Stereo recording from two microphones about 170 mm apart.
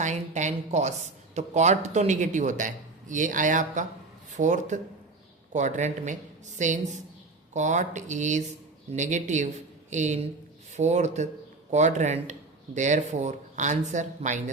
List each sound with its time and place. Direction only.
0.0 s speech: 45° right (ahead or behind)